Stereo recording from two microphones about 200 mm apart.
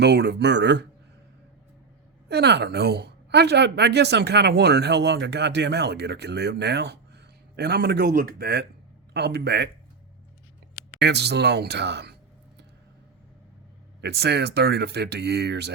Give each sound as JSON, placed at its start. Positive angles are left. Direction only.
{"t": 0.0, "sound": "a woman's voice", "side_deg": -55}
{"t": 2.3, "sound": "a woman's voice", "side_deg": -55}
{"t": 11.0, "sound": "a woman's voice", "side_deg": -55}
{"t": 14.0, "sound": "a woman's voice", "side_deg": -55}